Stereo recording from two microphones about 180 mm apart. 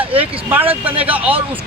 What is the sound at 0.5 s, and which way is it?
Speech, 10° right (ahead or behind).